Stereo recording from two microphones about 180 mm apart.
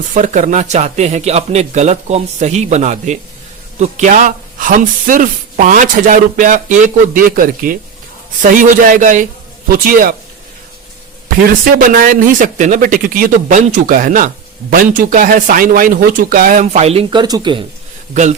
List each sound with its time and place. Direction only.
0.1 s a man's voice: 45° right (ahead or behind)
11.6 s speech: 50° right (ahead or behind); by 17.6 s 25° right (ahead or behind)
18.1 s a man's voice: 40° right (ahead or behind)